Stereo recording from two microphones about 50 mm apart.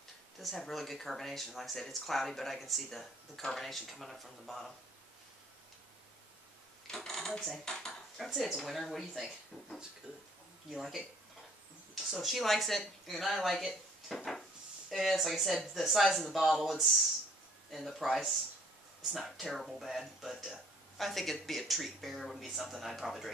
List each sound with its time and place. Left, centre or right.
0.4 s speech: centre
6.9 s a sound: centre
7.3 s speech: centre
7.6 s speech: centre
8.2 s speech: centre
10.7 s speech: centre